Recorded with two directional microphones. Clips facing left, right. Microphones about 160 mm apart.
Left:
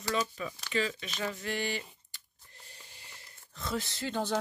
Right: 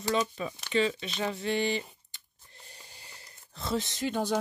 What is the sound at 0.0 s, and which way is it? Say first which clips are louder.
Speech: right 4 dB; 25° right (ahead or behind).